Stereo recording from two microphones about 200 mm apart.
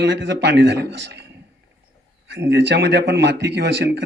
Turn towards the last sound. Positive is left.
turn(degrees=-60)  # may be behind; listen again after turning